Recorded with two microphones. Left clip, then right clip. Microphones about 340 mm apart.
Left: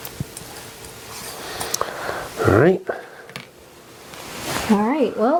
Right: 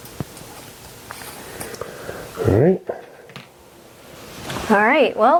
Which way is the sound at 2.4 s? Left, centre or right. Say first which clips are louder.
Left 2 dB; left.